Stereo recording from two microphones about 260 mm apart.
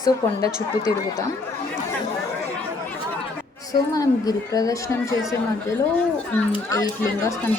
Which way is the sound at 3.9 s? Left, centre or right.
Centre.